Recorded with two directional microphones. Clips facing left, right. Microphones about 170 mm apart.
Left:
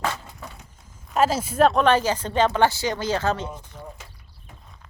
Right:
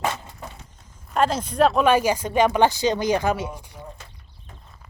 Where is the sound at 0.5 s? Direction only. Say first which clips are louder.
Right 1 dB; 5° left (ahead or behind); by 3.8 s 10° right (ahead or behind).